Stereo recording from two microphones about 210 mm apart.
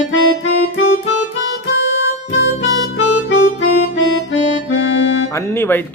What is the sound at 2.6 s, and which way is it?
Harmonica, 60° left (ahead or behind).